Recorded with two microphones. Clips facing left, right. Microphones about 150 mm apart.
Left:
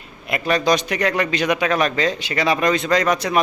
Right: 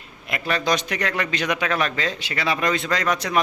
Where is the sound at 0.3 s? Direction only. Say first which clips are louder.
Left 5 dB; 20° left (ahead or behind).